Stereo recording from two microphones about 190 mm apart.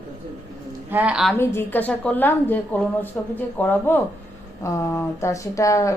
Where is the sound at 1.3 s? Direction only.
10° left (ahead or behind).